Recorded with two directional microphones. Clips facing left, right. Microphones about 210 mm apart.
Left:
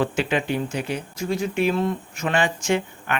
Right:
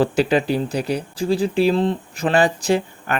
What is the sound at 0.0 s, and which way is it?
Speech, 35° right (ahead or behind).